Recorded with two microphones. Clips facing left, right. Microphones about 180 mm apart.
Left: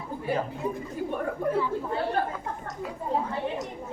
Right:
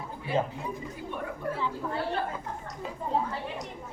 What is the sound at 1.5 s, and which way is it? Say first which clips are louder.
Speech: left 8 dB; 20° left (ahead or behind).